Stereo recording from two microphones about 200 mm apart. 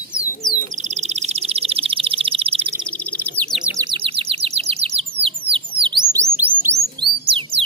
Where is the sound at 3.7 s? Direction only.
25° right (ahead or behind).